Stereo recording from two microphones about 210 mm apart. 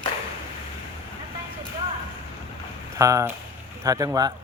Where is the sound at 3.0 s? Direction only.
15° right (ahead or behind).